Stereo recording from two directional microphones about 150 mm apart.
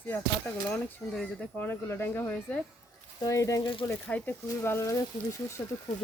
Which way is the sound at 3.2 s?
20° left (ahead or behind).